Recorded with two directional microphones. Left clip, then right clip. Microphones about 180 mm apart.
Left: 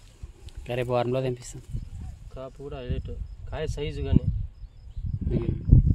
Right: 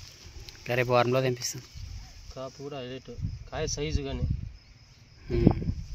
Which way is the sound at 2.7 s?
30° left (ahead or behind).